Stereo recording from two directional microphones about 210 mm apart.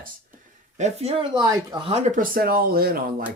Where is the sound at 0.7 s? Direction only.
30° right (ahead or behind).